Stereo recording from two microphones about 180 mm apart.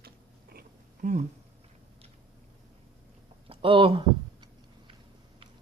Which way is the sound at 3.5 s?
30° right (ahead or behind).